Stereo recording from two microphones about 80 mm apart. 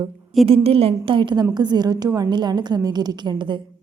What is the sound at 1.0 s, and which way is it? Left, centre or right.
Speech, right.